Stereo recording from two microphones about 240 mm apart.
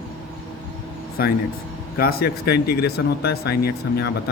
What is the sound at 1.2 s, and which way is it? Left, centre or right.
Speech, left.